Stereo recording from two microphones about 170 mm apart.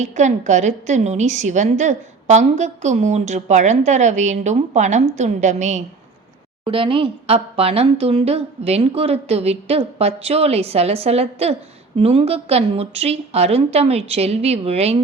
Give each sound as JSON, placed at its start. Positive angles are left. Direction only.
{"t": 0.0, "sound": "a woman's voice", "side_deg": -45}
{"t": 6.7, "sound": "speech", "side_deg": -30}